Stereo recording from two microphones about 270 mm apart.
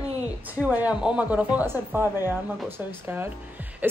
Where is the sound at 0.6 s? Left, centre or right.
Centre.